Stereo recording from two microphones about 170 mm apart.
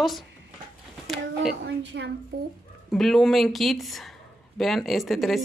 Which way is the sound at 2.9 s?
Centre (ahead or behind).